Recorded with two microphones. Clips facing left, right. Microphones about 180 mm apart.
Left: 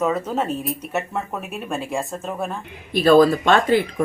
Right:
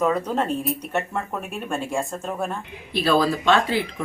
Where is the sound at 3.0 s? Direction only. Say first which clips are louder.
Left 6 dB; 50° left (ahead or behind).